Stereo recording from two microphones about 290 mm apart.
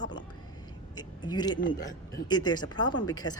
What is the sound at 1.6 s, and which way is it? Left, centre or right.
Speech, left.